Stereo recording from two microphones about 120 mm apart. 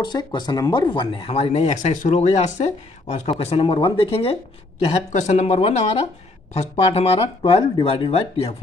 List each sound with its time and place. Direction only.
0.0 s speech: 40° left (ahead or behind)
1.3 s speech: 60° left (ahead or behind)
5.1 s speech: 75° left (ahead or behind)